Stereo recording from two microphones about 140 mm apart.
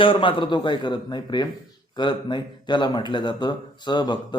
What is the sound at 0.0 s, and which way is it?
Speech, 40° left (ahead or behind).